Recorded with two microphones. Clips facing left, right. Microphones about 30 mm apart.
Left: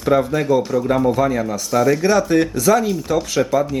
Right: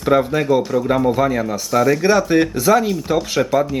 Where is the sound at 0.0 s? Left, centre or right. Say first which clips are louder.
Right 1 dB; centre.